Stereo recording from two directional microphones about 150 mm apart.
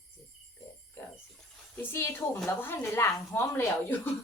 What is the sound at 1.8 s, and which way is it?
A woman's voice, 15° left (ahead or behind).